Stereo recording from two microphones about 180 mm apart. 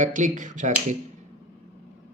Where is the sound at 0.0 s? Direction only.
45° right (ahead or behind).